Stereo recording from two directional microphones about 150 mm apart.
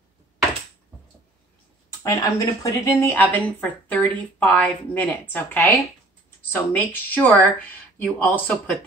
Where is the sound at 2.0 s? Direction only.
20° left (ahead or behind).